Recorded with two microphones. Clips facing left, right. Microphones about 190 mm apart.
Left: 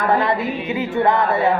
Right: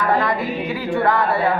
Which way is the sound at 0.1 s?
25° left (ahead or behind).